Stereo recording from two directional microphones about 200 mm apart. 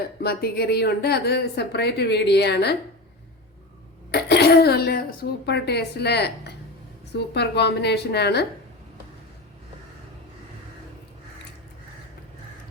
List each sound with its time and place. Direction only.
0.2 s a woman's voice: 50° left (ahead or behind)
4.1 s a child's voice: 55° left (ahead or behind)